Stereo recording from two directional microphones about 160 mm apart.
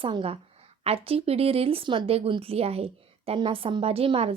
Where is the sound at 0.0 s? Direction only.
35° right (ahead or behind).